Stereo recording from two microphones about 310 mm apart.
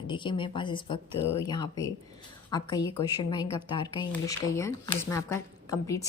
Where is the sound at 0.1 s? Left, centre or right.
Centre.